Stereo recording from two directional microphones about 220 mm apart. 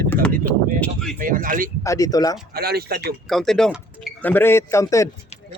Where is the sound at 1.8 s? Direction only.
15° left (ahead or behind).